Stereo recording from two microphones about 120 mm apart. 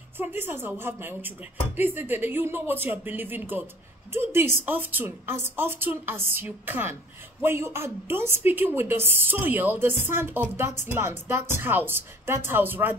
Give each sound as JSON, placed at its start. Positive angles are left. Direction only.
{"t": 0.2, "sound": "a woman's voice", "side_deg": -20}